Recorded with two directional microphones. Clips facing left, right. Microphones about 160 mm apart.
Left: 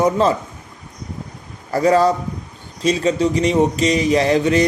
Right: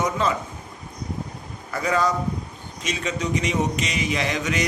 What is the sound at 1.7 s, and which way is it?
Speech, 35° left (ahead or behind).